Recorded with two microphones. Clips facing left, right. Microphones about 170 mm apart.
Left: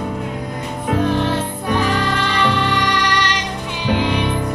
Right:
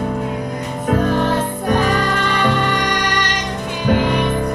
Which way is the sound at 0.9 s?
45° right (ahead or behind).